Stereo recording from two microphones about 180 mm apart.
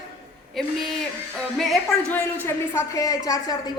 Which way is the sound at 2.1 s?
10° left (ahead or behind).